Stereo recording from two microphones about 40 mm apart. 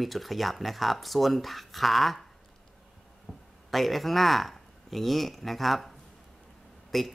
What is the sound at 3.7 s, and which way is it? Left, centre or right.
Speech, centre.